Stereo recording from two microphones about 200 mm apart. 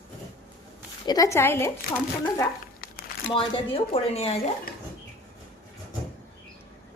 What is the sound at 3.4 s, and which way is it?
A woman's voice, 25° left (ahead or behind).